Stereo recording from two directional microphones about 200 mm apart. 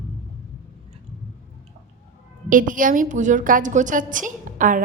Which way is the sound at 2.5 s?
40° right (ahead or behind).